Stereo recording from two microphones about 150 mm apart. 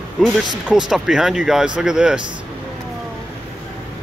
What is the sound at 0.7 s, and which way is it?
Speech, 5° right (ahead or behind).